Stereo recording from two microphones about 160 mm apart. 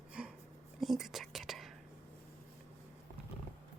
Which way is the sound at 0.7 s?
Centre (ahead or behind).